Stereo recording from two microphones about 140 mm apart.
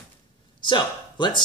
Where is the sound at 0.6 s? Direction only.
35° left (ahead or behind).